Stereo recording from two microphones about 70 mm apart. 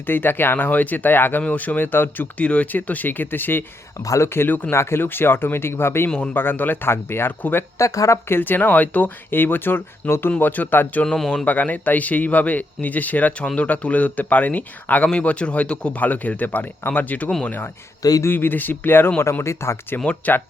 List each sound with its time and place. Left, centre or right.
0.0 s speech: left
3.9 s speech: left
4.2 s speech: left
4.7 s speech: left
7.8 s speech: left
8.3 s speech: left
11.0 s speech: centre
11.4 s speech: left
20.1 s speech: left